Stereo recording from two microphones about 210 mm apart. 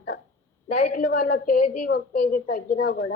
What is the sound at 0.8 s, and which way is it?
A woman's voice, 40° left (ahead or behind).